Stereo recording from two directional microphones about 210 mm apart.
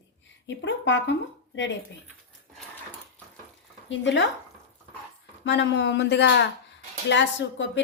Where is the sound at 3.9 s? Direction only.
60° left (ahead or behind).